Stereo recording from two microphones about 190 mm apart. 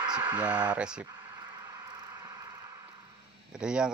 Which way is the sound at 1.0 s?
20° right (ahead or behind).